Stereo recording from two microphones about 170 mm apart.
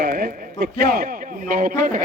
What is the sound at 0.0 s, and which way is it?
A man's voice, 60° right (ahead or behind).